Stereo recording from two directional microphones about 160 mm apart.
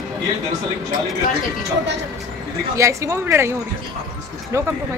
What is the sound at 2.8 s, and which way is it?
Speech, 20° right (ahead or behind).